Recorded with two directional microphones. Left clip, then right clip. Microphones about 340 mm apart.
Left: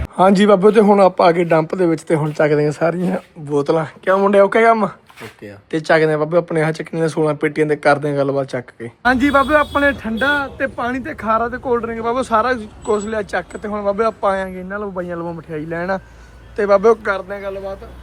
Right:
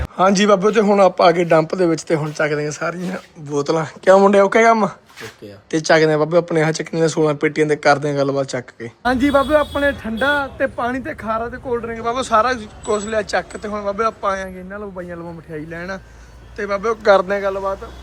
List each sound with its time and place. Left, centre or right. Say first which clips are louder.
0.2 s speech: left 2 dB; centre
17.3 s speech: right 7 dB; right